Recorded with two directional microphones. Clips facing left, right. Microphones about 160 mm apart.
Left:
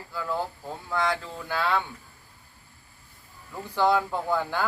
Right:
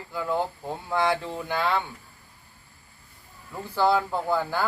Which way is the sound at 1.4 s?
15° right (ahead or behind).